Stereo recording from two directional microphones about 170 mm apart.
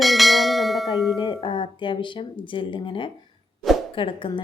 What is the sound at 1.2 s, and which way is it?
A woman's voice, 30° left (ahead or behind).